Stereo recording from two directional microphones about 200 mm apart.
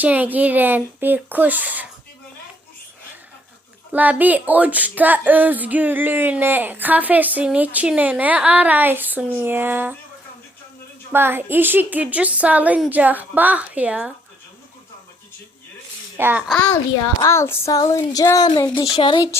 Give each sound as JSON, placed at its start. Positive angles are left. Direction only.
{"t": 0.0, "sound": "speech", "side_deg": -10}
{"t": 3.9, "sound": "speech", "side_deg": -10}
{"t": 11.1, "sound": "speech", "side_deg": -10}
{"t": 16.1, "sound": "speech", "side_deg": -10}
{"t": 17.2, "sound": "child singing", "side_deg": 15}
{"t": 18.9, "sound": "speech", "side_deg": 25}